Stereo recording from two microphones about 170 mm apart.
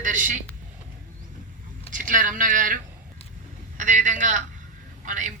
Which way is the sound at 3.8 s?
50° right (ahead or behind).